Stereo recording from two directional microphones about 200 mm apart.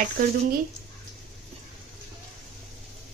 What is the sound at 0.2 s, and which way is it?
Speech, 45° right (ahead or behind).